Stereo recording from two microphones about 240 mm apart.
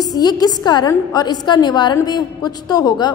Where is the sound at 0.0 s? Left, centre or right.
Centre.